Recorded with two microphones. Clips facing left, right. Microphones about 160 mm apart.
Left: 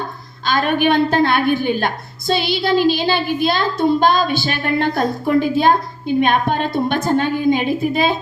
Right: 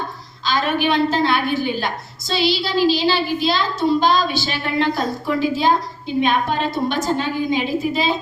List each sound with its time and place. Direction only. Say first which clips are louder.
0.4 s a woman's voice: left 3 dB; 55° left (ahead or behind)